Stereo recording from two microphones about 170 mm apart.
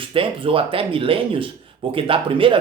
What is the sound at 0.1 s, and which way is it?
Speech, 30° right (ahead or behind).